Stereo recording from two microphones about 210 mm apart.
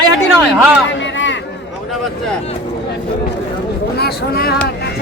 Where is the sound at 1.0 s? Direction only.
60° left (ahead or behind).